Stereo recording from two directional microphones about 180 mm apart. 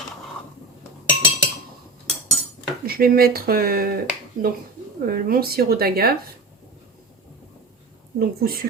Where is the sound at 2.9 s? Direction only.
55° right (ahead or behind).